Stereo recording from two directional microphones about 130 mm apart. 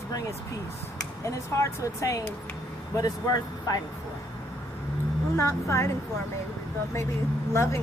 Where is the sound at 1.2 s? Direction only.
20° left (ahead or behind).